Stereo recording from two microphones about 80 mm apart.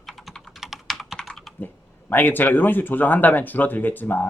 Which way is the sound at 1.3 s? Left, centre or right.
Centre.